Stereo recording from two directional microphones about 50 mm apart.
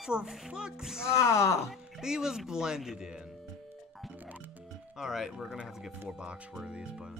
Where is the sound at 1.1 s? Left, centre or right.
Left.